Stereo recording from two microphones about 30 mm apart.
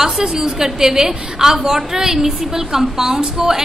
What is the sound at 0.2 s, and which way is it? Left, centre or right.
A woman's voice, right.